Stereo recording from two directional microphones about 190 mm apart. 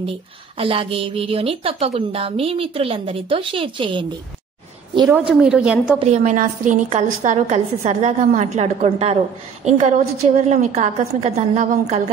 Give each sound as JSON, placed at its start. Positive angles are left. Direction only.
{"t": 0.6, "sound": "a woman's voice", "side_deg": -30}
{"t": 5.4, "sound": "a woman's voice", "side_deg": -5}
{"t": 5.9, "sound": "a woman's voice", "side_deg": -35}